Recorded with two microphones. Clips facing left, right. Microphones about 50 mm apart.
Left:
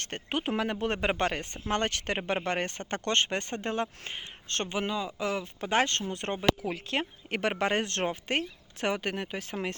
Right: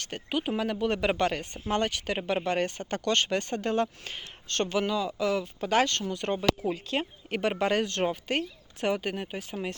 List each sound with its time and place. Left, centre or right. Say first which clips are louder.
0.0 s speech: right 1 dB; left
5.2 s speech: right 4 dB; left